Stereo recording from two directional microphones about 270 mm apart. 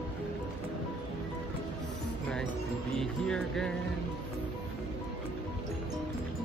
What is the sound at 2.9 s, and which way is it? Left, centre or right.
Speech, centre.